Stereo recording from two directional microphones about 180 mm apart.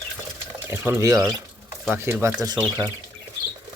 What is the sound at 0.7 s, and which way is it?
Speech, 15° right (ahead or behind).